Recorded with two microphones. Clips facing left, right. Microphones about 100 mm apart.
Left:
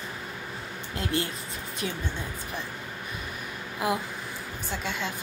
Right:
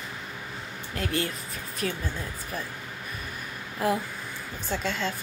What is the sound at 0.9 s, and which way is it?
Speech, 30° left (ahead or behind).